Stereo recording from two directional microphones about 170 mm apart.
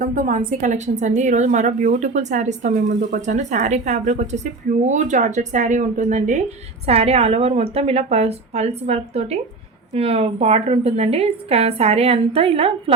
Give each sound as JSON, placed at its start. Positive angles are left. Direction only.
{"t": 0.0, "sound": "a woman's voice", "side_deg": -55}